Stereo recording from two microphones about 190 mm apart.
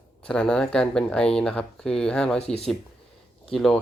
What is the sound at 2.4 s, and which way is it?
Speech, 35° left (ahead or behind).